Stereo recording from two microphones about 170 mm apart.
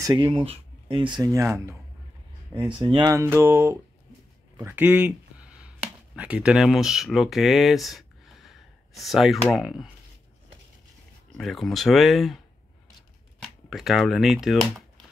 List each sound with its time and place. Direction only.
0.0 s speech: 30° right (ahead or behind); by 9.8 s centre (ahead or behind)
11.3 s speech: centre (ahead or behind)
13.4 s speech: centre (ahead or behind)